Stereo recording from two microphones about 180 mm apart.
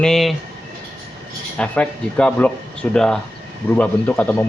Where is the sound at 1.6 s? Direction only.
5° left (ahead or behind).